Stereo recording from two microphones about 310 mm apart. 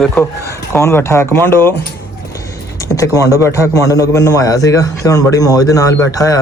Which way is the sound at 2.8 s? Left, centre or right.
Centre.